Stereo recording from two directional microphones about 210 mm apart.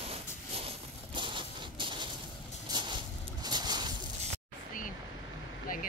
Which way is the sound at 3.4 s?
20° right (ahead or behind).